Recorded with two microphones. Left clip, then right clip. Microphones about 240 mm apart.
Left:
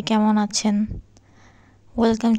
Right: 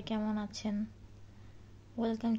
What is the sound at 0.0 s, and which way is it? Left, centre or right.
Speech, left.